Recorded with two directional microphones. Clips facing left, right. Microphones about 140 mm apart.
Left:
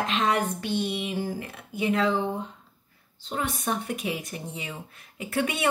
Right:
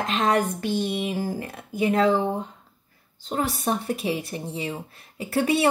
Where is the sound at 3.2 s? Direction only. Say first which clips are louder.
Right 4 dB; 35° right (ahead or behind).